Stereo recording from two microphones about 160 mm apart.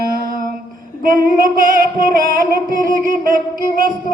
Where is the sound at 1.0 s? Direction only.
60° right (ahead or behind).